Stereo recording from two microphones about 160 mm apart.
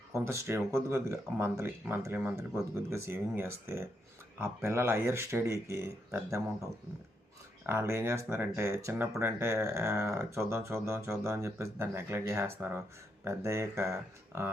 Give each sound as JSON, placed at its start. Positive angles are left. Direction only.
{"t": 0.1, "sound": "speech", "side_deg": -15}
{"t": 7.7, "sound": "speech", "side_deg": -15}